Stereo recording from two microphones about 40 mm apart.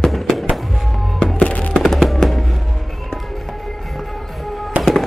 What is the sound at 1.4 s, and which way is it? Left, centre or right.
Fireworks, left.